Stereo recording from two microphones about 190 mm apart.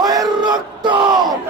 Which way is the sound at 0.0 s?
20° right (ahead or behind).